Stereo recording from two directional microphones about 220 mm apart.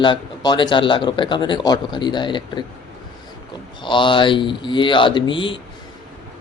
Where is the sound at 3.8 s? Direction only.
20° left (ahead or behind).